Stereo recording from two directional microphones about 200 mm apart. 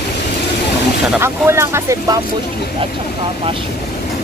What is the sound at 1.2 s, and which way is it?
Speech, 10° right (ahead or behind).